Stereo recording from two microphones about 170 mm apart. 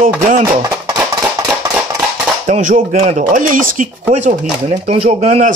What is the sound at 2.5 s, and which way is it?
A man's voice, 50° right (ahead or behind).